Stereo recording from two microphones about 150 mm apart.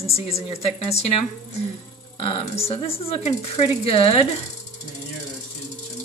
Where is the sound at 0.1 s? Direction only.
40° left (ahead or behind).